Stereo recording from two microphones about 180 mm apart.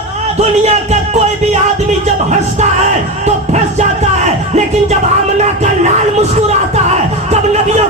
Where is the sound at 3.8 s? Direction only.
40° right (ahead or behind).